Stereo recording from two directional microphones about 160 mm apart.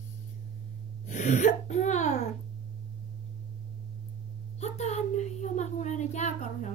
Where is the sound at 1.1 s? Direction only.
50° left (ahead or behind).